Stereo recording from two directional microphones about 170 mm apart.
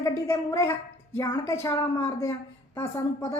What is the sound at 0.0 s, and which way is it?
A woman's voice, 20° left (ahead or behind).